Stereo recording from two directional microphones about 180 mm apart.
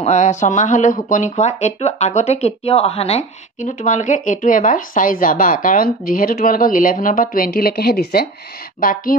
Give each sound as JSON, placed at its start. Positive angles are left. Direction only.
{"t": 0.0, "sound": "speech", "side_deg": 40}